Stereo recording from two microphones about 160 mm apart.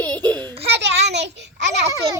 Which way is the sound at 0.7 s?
90° right.